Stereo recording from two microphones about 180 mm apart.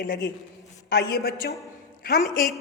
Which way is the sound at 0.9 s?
60° left (ahead or behind).